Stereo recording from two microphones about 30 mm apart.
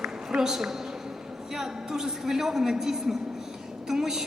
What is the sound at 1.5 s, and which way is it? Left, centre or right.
A man's voice, centre.